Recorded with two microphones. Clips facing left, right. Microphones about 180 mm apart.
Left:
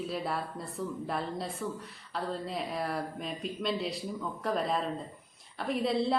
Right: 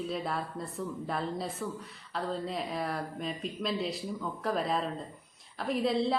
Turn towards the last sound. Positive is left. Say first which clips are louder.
# even
turn(degrees=0)  # may be behind; listen again after turning